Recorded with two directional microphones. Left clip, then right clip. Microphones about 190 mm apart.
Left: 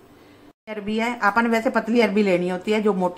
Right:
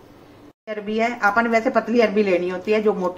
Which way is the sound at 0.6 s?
50° left (ahead or behind).